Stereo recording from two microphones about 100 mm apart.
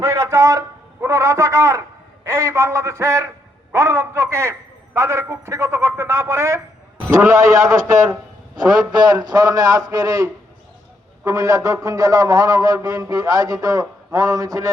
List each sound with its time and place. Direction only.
0.0 s a man's voice: 30° right (ahead or behind)